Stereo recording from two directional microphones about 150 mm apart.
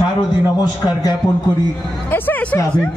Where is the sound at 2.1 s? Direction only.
15° left (ahead or behind).